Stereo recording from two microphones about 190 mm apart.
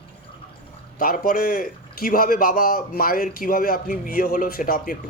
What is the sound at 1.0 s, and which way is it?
A man's voice, 50° left (ahead or behind).